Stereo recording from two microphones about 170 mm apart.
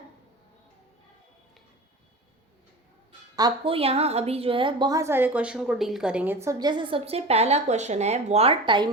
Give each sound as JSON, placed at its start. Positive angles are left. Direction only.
{"t": 3.3, "sound": "a woman's voice", "side_deg": -25}